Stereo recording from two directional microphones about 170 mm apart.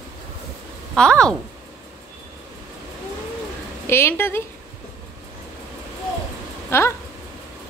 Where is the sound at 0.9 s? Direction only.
5° left (ahead or behind).